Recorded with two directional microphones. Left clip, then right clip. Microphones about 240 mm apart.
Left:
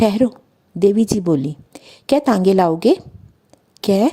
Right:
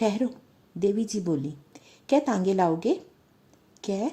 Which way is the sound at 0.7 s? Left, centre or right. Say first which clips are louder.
Left 11 dB; left.